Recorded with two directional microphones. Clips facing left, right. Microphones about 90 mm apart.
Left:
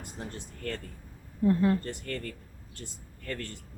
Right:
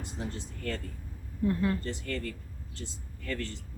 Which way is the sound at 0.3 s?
55° left (ahead or behind).